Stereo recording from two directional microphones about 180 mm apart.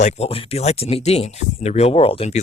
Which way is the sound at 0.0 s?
35° left (ahead or behind).